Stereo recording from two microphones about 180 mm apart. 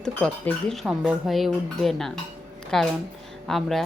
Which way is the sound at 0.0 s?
5° left (ahead or behind).